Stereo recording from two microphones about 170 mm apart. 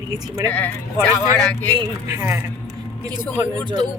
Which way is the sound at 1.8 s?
15° right (ahead or behind).